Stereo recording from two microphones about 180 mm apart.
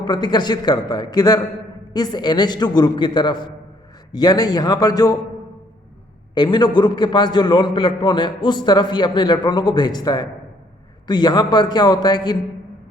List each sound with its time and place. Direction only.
0.0 s a man's voice: 25° left (ahead or behind)
6.3 s a man's voice: 25° left (ahead or behind)